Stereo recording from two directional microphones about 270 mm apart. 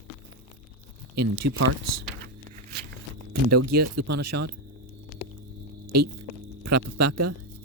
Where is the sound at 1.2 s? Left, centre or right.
Right.